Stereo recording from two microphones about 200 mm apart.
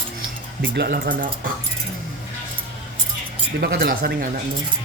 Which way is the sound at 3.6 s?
55° right (ahead or behind).